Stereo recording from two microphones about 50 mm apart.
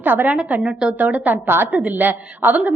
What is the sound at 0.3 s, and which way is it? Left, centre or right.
Speech, right.